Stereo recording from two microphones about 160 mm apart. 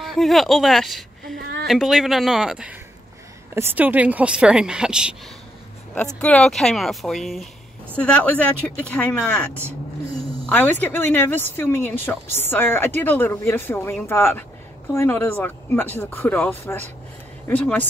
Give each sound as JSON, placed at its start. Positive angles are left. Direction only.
{"t": 0.0, "sound": "speech", "side_deg": 0}
{"t": 6.2, "sound": "speech", "side_deg": 5}
{"t": 10.5, "sound": "speech", "side_deg": 10}